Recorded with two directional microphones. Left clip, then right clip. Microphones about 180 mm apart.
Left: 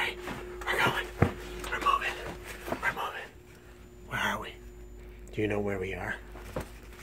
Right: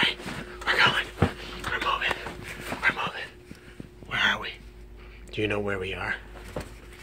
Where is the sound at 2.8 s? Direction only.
25° left (ahead or behind).